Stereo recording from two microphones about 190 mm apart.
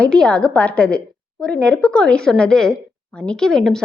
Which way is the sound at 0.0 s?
5° left (ahead or behind).